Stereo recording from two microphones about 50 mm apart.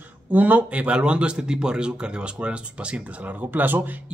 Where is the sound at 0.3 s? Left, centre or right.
Right.